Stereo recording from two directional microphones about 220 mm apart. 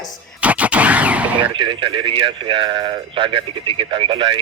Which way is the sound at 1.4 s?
20° right (ahead or behind).